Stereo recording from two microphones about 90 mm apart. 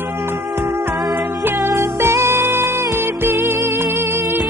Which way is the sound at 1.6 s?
25° right (ahead or behind).